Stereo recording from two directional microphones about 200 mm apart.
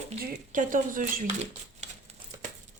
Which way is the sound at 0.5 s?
40° right (ahead or behind).